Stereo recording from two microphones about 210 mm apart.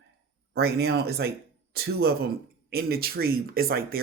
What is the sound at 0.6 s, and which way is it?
Speech, 50° right (ahead or behind).